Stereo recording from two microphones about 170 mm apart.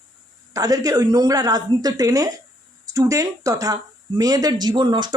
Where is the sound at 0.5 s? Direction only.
20° right (ahead or behind).